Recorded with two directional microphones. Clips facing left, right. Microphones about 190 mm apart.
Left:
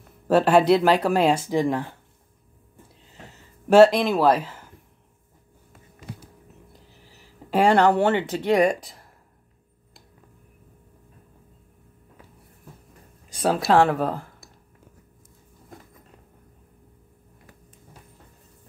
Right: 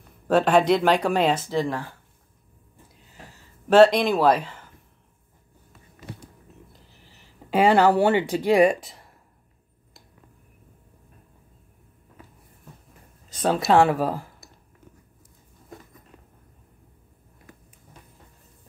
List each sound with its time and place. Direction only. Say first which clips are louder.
0.3 s speech: left 2 dB; 5° left (ahead or behind)
3.7 s speech: left 1 dB; 5° left (ahead or behind)
7.5 s speech: even; 5° right (ahead or behind)
13.3 s speech: even; 5° left (ahead or behind)